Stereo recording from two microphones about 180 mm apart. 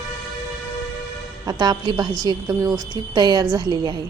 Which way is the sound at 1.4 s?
20° right (ahead or behind).